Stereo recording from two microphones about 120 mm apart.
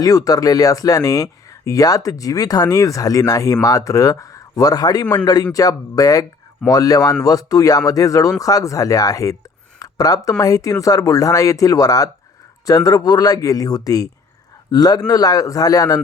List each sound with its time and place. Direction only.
0.0 s speech: 30° left (ahead or behind)
9.7 s a sound: 30° left (ahead or behind)
10.2 s speech: 30° left (ahead or behind)